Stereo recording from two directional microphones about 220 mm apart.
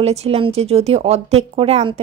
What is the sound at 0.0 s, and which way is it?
Speech, 30° right (ahead or behind).